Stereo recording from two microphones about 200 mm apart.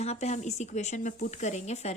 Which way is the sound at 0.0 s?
35° left (ahead or behind).